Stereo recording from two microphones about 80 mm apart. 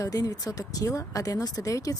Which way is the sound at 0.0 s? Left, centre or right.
Left.